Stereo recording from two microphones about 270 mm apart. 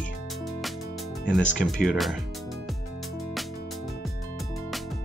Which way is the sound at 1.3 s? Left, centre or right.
Centre.